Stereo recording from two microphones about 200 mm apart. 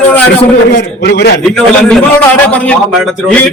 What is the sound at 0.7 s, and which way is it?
Speech, 60° left (ahead or behind).